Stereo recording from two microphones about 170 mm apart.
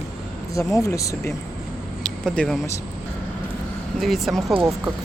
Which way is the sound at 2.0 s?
5° left (ahead or behind).